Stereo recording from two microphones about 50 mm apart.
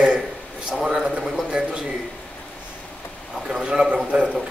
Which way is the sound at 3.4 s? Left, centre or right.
Centre.